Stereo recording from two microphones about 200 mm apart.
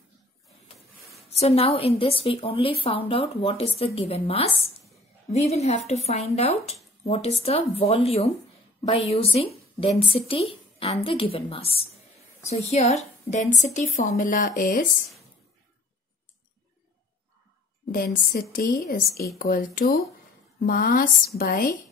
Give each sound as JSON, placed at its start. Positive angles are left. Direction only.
{"t": 1.3, "sound": "a woman's voice", "side_deg": 30}
{"t": 17.9, "sound": "a woman's voice", "side_deg": 45}